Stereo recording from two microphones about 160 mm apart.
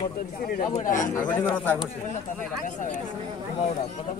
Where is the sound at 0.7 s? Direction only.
50° left (ahead or behind).